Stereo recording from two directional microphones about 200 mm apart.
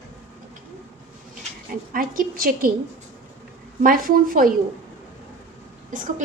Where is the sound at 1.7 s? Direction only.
45° right (ahead or behind).